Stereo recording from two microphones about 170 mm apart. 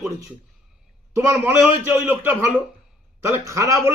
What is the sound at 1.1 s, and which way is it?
A man's voice, 15° right (ahead or behind).